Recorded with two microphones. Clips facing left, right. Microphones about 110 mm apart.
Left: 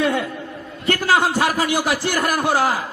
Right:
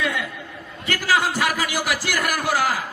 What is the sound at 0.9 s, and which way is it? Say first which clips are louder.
A man's voice: left 4 dB; 30° left (ahead or behind).